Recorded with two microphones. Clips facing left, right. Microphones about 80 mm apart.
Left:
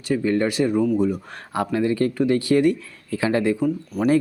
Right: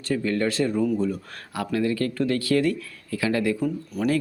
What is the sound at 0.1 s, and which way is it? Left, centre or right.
Speech, centre.